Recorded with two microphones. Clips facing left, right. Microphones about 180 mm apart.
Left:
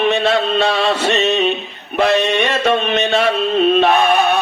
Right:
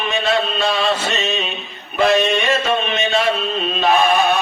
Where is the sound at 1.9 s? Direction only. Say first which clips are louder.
Left 1 dB; 65° left (ahead or behind).